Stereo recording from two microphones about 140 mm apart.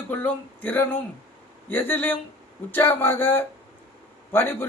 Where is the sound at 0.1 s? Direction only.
10° left (ahead or behind).